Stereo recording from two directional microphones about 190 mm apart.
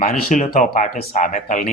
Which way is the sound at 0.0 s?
45° left (ahead or behind).